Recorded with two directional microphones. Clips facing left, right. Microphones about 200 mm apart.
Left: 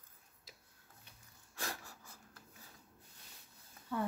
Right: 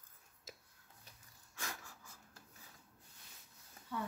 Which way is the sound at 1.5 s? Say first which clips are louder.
Left 4 dB; 35° left (ahead or behind).